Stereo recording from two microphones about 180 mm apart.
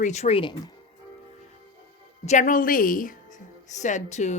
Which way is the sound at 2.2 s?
40° left (ahead or behind).